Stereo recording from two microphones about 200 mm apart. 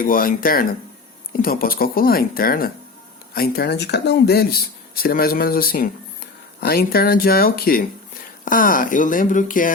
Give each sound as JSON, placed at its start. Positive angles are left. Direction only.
{"t": 0.0, "sound": "speech", "side_deg": 45}